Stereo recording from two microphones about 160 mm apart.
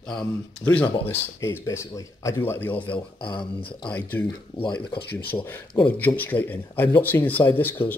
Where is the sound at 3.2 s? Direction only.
30° left (ahead or behind).